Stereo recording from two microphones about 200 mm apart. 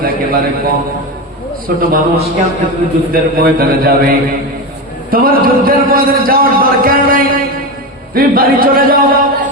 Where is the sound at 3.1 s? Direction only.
45° right (ahead or behind).